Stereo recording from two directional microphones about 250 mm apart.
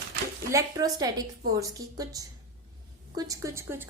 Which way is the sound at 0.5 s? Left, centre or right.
Centre.